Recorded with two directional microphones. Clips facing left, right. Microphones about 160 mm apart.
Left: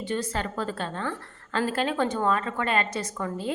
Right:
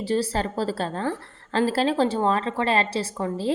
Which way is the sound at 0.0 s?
35° right (ahead or behind).